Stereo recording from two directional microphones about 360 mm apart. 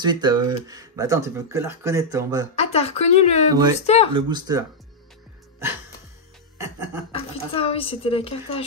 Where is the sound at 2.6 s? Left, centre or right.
Centre.